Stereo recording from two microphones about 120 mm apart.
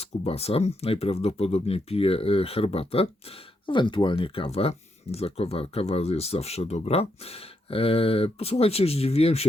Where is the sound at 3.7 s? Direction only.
40° left (ahead or behind).